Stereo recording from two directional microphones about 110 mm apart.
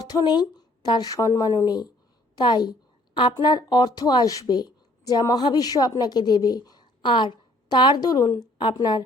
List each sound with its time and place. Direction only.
0.1 s a woman's voice: 40° left (ahead or behind)
8.5 s a woman's voice: 45° left (ahead or behind)